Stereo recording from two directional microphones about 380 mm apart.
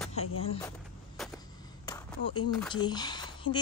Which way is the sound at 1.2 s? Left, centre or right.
Centre.